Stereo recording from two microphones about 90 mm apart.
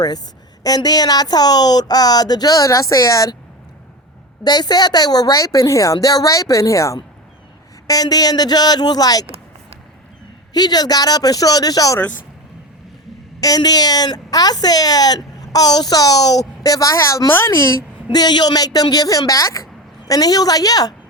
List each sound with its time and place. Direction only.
0.6 s speech: 45° left (ahead or behind)
4.4 s a woman's voice: 50° left (ahead or behind)
10.5 s speech: 50° left (ahead or behind)
11.9 s speech: 20° left (ahead or behind)
13.4 s a woman's voice: 45° left (ahead or behind)
18.1 s speech: 50° left (ahead or behind)